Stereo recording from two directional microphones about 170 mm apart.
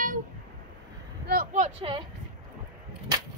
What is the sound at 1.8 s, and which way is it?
Speech, 30° right (ahead or behind).